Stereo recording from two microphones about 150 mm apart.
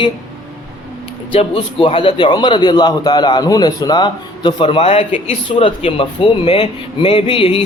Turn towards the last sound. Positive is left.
turn(degrees=40)  # may be behind; listen again after turning